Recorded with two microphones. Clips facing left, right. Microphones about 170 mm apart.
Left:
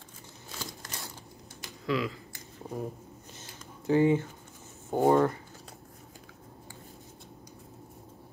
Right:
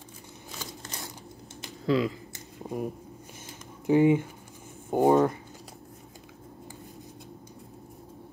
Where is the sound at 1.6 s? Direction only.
25° right (ahead or behind).